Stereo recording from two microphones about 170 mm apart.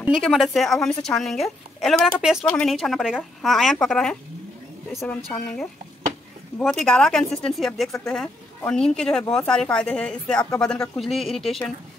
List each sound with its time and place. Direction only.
0.0 s a woman's voice: 5° right (ahead or behind)
5.0 s a woman's voice: 15° left (ahead or behind)
6.6 s a woman's voice: 5° left (ahead or behind)